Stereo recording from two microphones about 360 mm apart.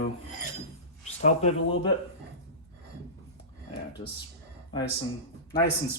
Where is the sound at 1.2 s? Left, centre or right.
Centre.